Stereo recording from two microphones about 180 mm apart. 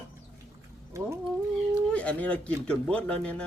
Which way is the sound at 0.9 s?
15° right (ahead or behind).